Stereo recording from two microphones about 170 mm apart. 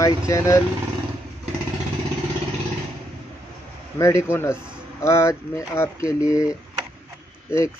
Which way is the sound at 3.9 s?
15° left (ahead or behind).